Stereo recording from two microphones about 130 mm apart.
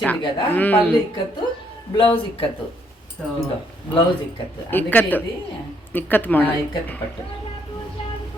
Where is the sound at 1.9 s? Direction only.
40° left (ahead or behind).